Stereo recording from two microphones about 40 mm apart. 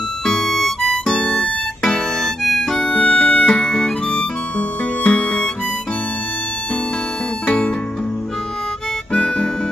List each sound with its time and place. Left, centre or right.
0.2 s music: centre
1.3 s music: left
2.2 s harmonica: centre
2.8 s music: left
4.6 s harmonica: left
7.4 s music: left
9.1 s harmonica: left